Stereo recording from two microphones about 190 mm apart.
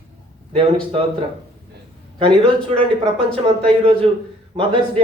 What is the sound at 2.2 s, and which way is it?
Speech, 25° right (ahead or behind).